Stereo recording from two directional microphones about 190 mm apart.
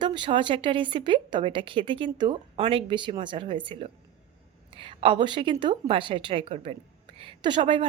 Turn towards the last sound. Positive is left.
turn(degrees=-25)  # may be behind; listen again after turning